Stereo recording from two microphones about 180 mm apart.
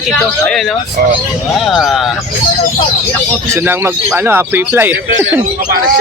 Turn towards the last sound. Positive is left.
turn(degrees=-10)  # may be behind; listen again after turning